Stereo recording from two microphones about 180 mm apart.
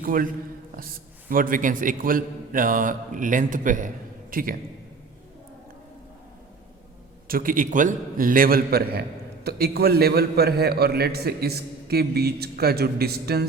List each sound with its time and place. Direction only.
0.0 s a man's voice: 50° right (ahead or behind)
1.3 s a man's voice: 50° right (ahead or behind)
7.3 s a man's voice: 50° right (ahead or behind)